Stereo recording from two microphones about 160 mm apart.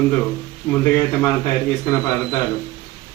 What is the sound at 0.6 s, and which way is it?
Speech, 15° left (ahead or behind).